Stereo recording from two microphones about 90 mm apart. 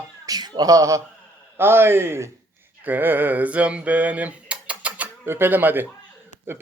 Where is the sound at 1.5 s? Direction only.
25° right (ahead or behind).